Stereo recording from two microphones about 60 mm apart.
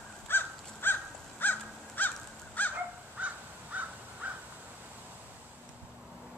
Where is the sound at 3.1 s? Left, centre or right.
Right.